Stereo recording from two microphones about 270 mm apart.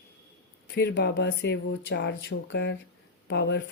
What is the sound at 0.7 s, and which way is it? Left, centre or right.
Speech, left.